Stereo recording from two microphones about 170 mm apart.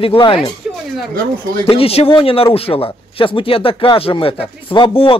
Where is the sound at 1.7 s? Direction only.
35° left (ahead or behind).